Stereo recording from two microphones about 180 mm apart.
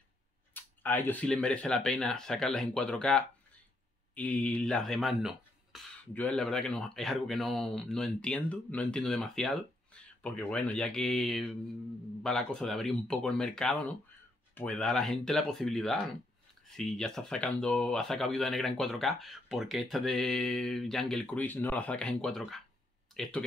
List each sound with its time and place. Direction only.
0.6 s speech: 10° left (ahead or behind)